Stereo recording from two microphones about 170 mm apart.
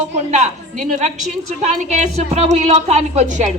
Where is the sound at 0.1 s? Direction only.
40° right (ahead or behind).